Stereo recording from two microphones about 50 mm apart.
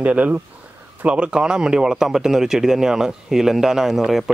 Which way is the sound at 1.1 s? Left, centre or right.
Right.